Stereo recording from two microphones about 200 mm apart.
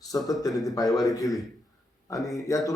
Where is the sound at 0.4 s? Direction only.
15° left (ahead or behind).